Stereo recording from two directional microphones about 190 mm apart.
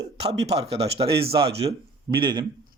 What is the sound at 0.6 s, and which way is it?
Speech, 30° right (ahead or behind).